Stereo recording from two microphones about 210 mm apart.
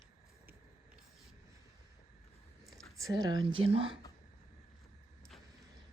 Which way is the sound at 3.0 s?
15° right (ahead or behind).